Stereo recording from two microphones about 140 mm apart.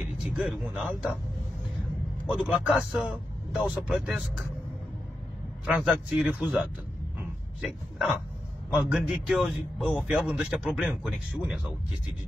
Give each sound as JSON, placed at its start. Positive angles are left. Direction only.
{"t": 0.0, "sound": "speech", "side_deg": -5}
{"t": 2.2, "sound": "a man's voice", "side_deg": -10}
{"t": 5.7, "sound": "a man's voice", "side_deg": -5}
{"t": 7.6, "sound": "a man's voice", "side_deg": 0}